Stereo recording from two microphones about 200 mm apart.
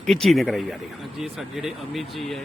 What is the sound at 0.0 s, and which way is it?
Speech, centre (ahead or behind).